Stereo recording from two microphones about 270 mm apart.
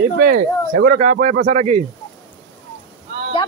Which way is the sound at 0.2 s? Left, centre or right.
Right.